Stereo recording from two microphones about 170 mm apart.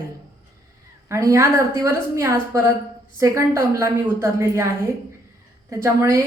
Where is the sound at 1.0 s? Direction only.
20° right (ahead or behind).